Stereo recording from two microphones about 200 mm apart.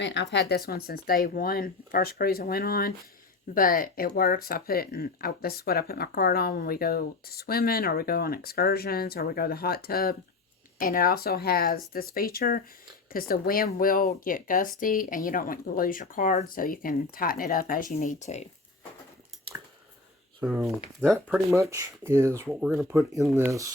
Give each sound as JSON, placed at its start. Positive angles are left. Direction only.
{"t": 0.0, "sound": "speech", "side_deg": 60}
{"t": 20.4, "sound": "speech", "side_deg": -5}
{"t": 21.5, "sound": "speech", "side_deg": -15}